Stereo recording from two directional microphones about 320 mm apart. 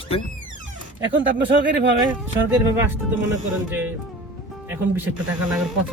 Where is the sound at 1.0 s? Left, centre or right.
Right.